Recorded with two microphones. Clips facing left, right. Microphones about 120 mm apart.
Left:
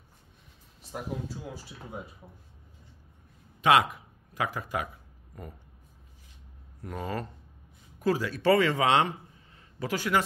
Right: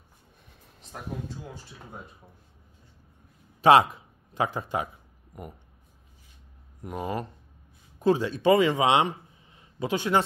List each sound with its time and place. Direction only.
3.6 s speech: 30° right (ahead or behind)
6.8 s a man's voice: 20° right (ahead or behind)